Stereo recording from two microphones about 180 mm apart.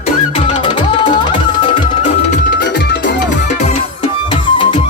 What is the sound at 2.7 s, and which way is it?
Music, 80° left.